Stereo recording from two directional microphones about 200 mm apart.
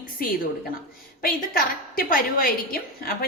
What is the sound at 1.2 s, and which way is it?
A woman's voice, 45° left (ahead or behind).